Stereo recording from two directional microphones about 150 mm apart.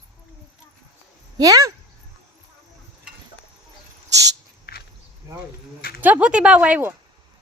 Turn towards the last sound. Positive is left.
turn(degrees=-10)  # may be behind; listen again after turning